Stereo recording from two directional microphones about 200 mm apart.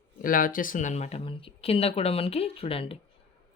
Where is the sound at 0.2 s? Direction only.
45° left (ahead or behind).